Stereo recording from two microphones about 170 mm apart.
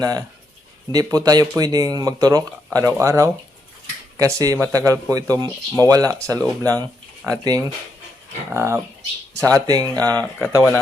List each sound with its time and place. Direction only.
0.0 s speech: 20° right (ahead or behind)
10.2 s speech: 5° left (ahead or behind)